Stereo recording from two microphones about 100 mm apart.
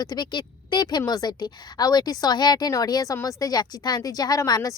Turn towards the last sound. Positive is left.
turn(degrees=40)  # may be behind; listen again after turning